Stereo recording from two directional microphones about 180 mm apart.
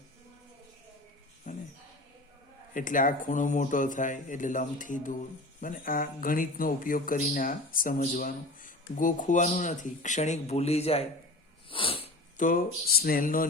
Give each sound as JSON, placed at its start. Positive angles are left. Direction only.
{"t": 1.5, "sound": "a sound", "side_deg": 45}
{"t": 2.7, "sound": "speech", "side_deg": 50}
{"t": 11.7, "sound": "sniff", "side_deg": 30}
{"t": 12.4, "sound": "speech", "side_deg": 50}